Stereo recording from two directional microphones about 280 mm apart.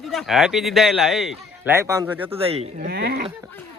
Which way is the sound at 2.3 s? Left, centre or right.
Right.